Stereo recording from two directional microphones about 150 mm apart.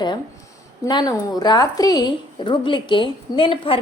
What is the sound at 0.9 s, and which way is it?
A woman's voice, 30° left (ahead or behind).